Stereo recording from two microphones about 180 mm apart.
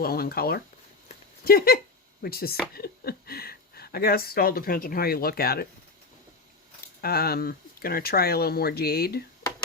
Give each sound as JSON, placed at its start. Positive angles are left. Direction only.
{"t": 0.0, "sound": "speech", "side_deg": 55}
{"t": 7.0, "sound": "speech", "side_deg": 60}